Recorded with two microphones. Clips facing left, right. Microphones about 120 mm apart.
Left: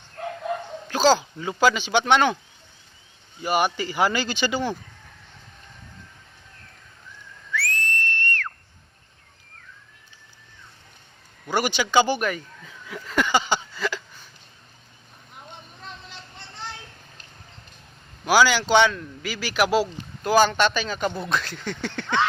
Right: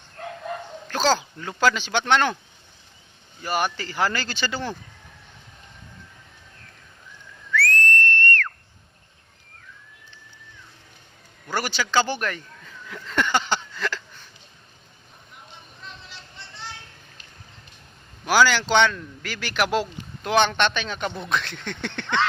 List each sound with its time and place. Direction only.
0.9 s a man's voice: 5° left (ahead or behind)
3.4 s a man's voice: 10° left (ahead or behind)
7.5 s whistle: 10° left (ahead or behind)
11.4 s a sound: 15° left (ahead or behind)
15.3 s vehicle: 45° left (ahead or behind)
18.3 s a man's voice: 10° left (ahead or behind)